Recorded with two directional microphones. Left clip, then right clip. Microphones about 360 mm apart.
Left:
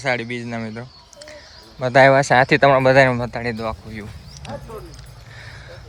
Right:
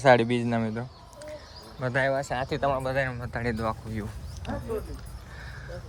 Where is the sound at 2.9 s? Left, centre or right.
Centre.